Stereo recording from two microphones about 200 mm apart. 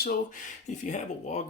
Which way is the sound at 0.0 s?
45° left (ahead or behind).